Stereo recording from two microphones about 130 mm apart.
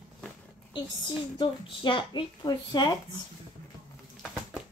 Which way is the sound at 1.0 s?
35° left (ahead or behind).